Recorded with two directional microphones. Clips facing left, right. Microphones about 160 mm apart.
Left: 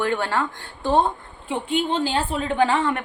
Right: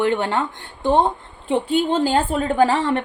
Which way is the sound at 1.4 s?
30° right (ahead or behind).